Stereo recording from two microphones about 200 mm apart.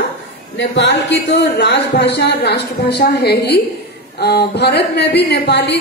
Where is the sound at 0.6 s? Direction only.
65° left (ahead or behind).